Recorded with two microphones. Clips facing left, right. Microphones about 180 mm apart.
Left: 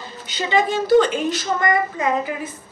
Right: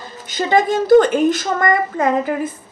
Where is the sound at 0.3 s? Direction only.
45° right (ahead or behind).